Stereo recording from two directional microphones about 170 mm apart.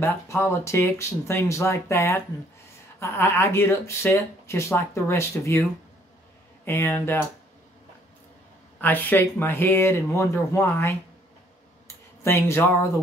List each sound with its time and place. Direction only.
0.0 s speech: 15° left (ahead or behind)
8.8 s speech: 10° left (ahead or behind)
12.2 s speech: 15° left (ahead or behind)